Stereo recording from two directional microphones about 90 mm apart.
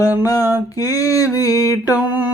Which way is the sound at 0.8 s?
40° left (ahead or behind).